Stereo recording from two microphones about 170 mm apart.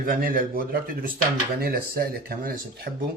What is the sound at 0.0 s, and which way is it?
Speech, 55° right (ahead or behind).